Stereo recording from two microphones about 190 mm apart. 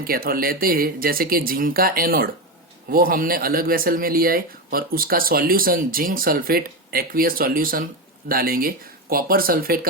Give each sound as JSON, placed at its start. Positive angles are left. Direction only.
{"t": 0.0, "sound": "speech", "side_deg": -50}